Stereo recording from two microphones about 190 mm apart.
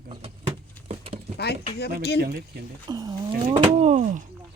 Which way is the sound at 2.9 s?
20° right (ahead or behind).